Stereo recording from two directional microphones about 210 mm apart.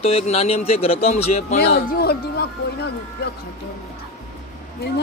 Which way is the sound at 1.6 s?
50° left (ahead or behind).